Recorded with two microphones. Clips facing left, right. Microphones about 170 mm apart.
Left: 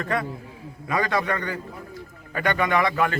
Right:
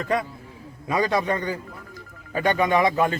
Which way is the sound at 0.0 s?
15° right (ahead or behind).